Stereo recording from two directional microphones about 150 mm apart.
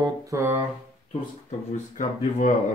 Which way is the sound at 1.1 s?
50° left (ahead or behind).